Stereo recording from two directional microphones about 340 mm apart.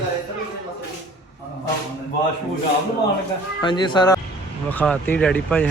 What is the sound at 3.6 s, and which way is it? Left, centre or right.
Speech, centre.